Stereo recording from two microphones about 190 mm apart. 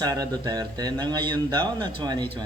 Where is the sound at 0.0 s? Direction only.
20° right (ahead or behind).